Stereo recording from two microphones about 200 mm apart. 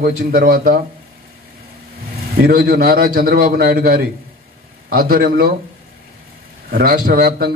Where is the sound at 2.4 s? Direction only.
45° right (ahead or behind).